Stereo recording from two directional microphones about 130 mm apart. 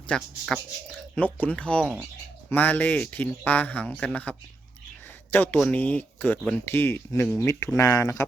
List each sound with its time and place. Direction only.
0.1 s speech: centre (ahead or behind)
1.1 s speech: 10° left (ahead or behind)